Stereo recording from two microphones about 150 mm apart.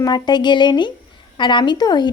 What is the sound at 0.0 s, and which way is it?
A woman's voice, 30° left (ahead or behind).